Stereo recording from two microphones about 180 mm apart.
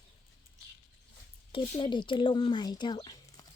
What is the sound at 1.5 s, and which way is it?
Speech, 25° left (ahead or behind).